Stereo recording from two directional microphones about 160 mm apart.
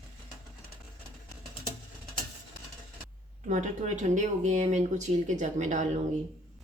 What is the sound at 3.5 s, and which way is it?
Speech, 50° right (ahead or behind).